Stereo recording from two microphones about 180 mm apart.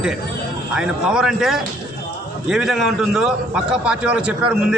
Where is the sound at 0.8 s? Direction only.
5° right (ahead or behind).